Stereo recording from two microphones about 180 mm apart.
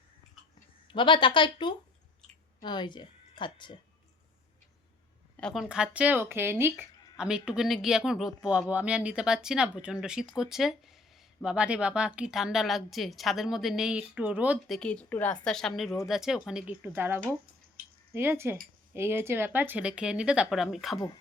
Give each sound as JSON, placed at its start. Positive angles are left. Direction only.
{"t": 0.9, "sound": "speech", "side_deg": 25}
{"t": 5.4, "sound": "speech", "side_deg": 0}
{"t": 14.8, "sound": "speech", "side_deg": 5}